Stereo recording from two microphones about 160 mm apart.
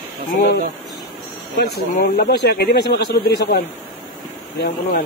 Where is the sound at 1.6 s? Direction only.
80° left.